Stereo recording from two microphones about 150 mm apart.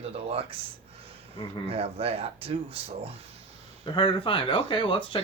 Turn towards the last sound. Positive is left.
turn(degrees=35)  # may be behind; listen again after turning